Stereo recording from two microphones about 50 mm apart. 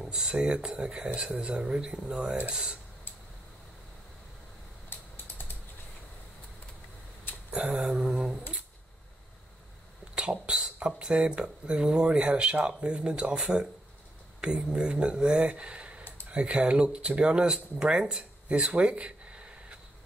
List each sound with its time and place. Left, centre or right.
0.0 s speech: centre
4.8 s typing: left
7.5 s speech: right
10.1 s speech: centre
16.3 s a sound: right
16.5 s speech: centre
18.7 s a sound: right